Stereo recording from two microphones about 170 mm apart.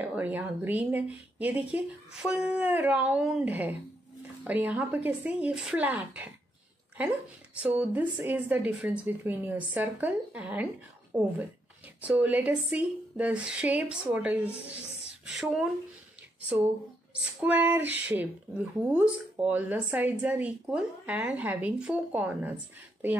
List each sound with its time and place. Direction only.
0.0 s speech: 10° right (ahead or behind)
17.1 s speech: 5° right (ahead or behind)